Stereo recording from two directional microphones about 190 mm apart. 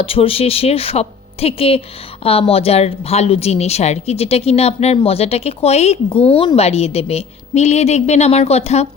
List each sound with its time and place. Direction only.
0.0 s speech: 30° left (ahead or behind)